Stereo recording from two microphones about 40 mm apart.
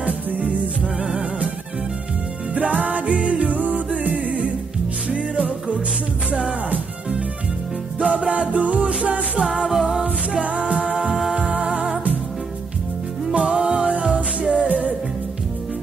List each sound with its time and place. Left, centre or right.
0.0 s music: right
2.5 s music: right
8.0 s music: right
9.4 s music: centre
9.7 s a capella: centre
10.4 s a capella: right
10.9 s music: right
13.3 s music: right
14.7 s music: right